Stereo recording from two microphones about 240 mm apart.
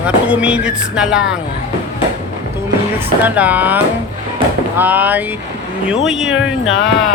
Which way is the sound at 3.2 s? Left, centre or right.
Centre.